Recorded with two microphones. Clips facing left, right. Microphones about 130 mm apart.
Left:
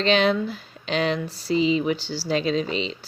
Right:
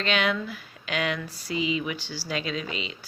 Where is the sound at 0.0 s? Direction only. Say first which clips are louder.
Left 6 dB; 30° left (ahead or behind).